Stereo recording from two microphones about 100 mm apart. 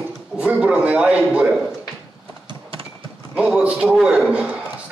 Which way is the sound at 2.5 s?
60° right (ahead or behind).